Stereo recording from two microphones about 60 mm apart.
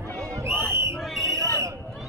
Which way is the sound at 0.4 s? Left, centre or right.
Right.